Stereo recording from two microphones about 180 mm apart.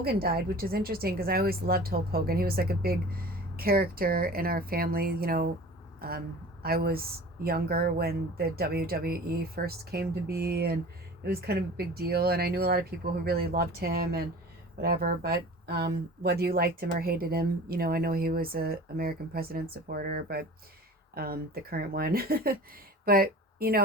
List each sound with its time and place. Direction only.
0.0 s a woman's voice: 60° right (ahead or behind)